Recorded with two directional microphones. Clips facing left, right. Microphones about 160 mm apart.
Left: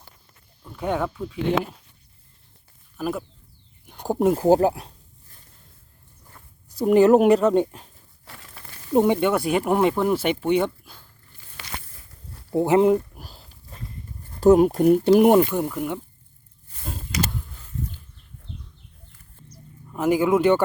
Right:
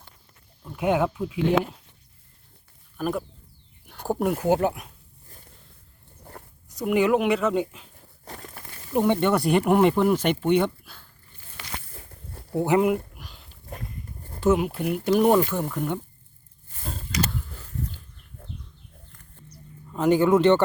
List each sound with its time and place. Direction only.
0.6 s speech: 10° right (ahead or behind)
3.0 s speech: 5° left (ahead or behind)
3.9 s speech: 15° left (ahead or behind)
4.4 s speech: 35° left (ahead or behind)
6.7 s speech: 35° left (ahead or behind)
8.2 s crushing: 40° right (ahead or behind)
9.0 s speech: 5° left (ahead or behind)
11.9 s walk: 50° right (ahead or behind)
12.5 s a sound: 25° left (ahead or behind)
14.4 s speech: 40° left (ahead or behind)
15.1 s speech: 20° left (ahead or behind)
19.9 s a man's voice: 5° left (ahead or behind)